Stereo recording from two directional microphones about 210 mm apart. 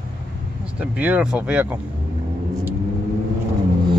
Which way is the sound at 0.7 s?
5° right (ahead or behind).